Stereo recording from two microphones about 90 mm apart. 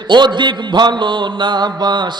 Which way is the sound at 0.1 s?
60° right (ahead or behind).